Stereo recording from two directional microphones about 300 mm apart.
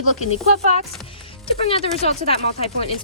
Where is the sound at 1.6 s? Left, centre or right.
Centre.